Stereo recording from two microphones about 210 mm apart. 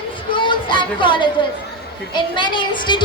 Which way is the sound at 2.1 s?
20° left (ahead or behind).